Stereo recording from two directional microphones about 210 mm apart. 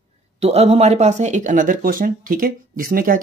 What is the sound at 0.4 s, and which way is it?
Speech, 30° right (ahead or behind).